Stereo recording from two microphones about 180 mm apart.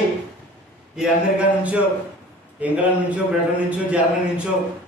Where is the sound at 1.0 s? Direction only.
5° right (ahead or behind).